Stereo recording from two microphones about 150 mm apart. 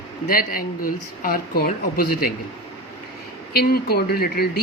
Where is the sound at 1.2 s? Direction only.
85° left.